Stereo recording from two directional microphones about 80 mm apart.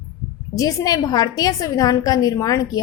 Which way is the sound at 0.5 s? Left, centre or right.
Left.